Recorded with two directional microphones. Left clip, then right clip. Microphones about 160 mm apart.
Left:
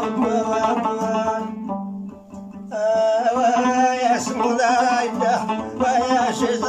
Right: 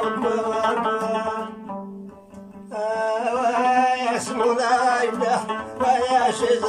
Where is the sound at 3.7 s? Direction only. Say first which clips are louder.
Left 2 dB; 5° right (ahead or behind).